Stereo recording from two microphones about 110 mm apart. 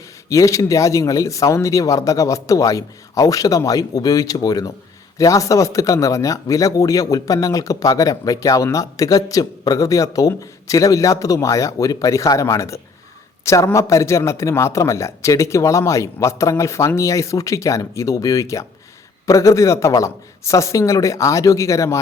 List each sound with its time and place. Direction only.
0.3 s a man's voice: 30° left (ahead or behind)